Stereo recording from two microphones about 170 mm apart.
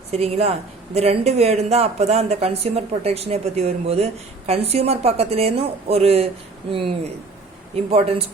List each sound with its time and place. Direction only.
0.1 s speech: 35° right (ahead or behind)